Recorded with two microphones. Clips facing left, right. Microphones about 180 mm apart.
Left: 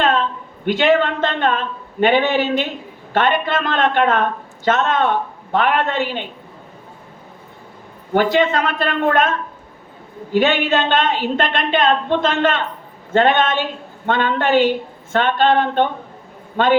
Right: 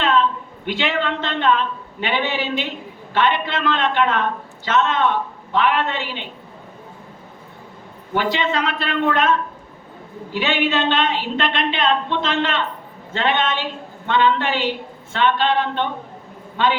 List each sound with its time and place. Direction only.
0.0 s a woman's voice: 50° left (ahead or behind)
8.1 s a man's voice: 50° left (ahead or behind)